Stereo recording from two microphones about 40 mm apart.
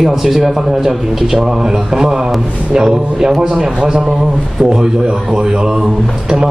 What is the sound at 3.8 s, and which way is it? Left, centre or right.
Speech, right.